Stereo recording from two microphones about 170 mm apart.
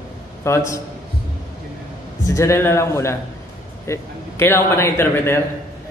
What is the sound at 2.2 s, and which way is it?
Speech, 15° left (ahead or behind).